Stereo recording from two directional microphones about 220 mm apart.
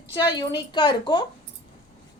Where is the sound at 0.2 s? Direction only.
20° left (ahead or behind).